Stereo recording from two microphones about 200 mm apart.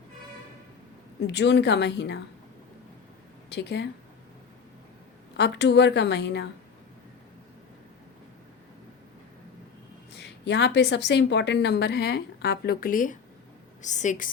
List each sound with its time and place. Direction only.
1.2 s a woman's voice: 60° left (ahead or behind)
3.5 s a woman's voice: 60° left (ahead or behind)
5.4 s a woman's voice: 60° left (ahead or behind)
10.2 s a woman's voice: 60° left (ahead or behind); by 14.3 s 40° left (ahead or behind)